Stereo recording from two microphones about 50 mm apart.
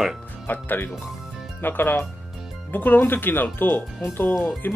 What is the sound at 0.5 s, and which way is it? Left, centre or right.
Speech, left.